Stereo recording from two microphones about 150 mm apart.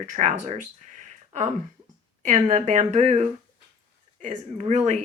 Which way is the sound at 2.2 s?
50° right (ahead or behind).